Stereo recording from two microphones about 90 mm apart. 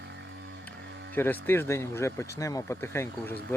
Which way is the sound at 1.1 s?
25° left (ahead or behind).